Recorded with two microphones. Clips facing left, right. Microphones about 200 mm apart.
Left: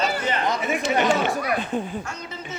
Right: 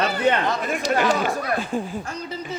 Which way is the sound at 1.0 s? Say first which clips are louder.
Left 1 dB; centre (ahead or behind).